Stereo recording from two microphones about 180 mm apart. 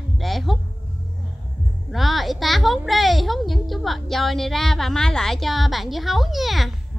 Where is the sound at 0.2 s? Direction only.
Centre (ahead or behind).